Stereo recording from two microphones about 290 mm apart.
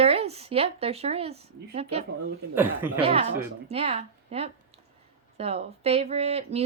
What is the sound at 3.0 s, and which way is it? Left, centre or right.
Speech, centre.